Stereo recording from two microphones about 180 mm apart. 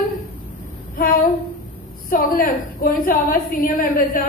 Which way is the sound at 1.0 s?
50° left (ahead or behind).